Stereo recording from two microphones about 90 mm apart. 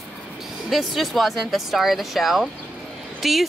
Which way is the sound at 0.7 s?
Centre (ahead or behind).